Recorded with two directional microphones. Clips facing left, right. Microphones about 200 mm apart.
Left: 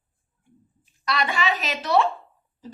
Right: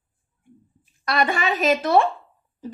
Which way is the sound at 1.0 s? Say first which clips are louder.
Right 3 dB; 50° right (ahead or behind).